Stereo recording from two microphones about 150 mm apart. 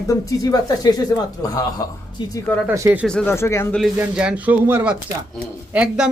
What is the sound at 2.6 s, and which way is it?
Speech, 20° right (ahead or behind).